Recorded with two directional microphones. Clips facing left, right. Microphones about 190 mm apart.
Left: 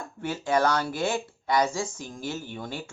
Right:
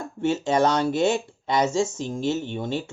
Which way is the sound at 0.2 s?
25° right (ahead or behind).